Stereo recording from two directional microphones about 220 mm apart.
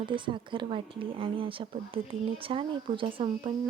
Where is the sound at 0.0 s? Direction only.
20° right (ahead or behind).